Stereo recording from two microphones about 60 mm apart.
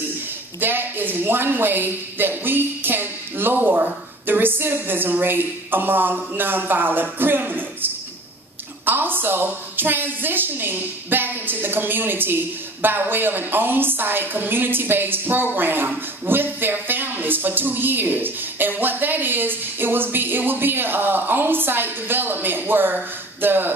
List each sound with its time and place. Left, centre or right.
0.6 s speech: right